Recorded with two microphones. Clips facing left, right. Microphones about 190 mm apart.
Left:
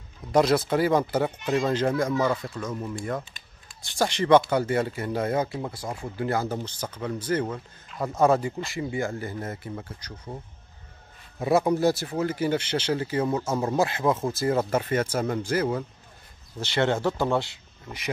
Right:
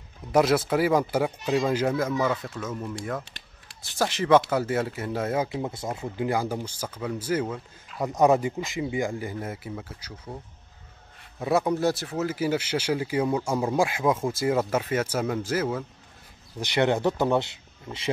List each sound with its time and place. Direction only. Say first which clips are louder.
0.3 s speech: even; 10° right (ahead or behind)
5.5 s speech: right 2 dB; 20° right (ahead or behind); by 8.0 s centre (ahead or behind)
8.0 s speech: right 1 dB; 15° right (ahead or behind)
11.3 s speech: left 2 dB; centre (ahead or behind)
16.5 s speech: right 1 dB; 15° right (ahead or behind)